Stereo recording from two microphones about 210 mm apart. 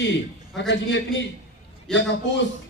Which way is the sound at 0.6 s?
60° left (ahead or behind).